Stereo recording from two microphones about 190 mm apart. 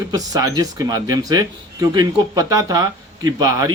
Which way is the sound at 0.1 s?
20° right (ahead or behind).